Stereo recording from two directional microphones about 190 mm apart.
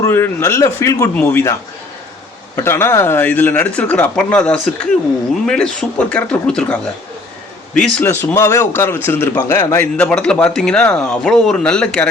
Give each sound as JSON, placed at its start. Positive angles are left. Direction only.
{"t": 0.0, "sound": "a man's voice", "side_deg": 15}
{"t": 2.6, "sound": "a man's voice", "side_deg": 15}